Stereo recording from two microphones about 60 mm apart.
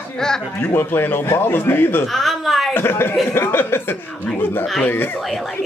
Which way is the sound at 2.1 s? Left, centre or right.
Centre.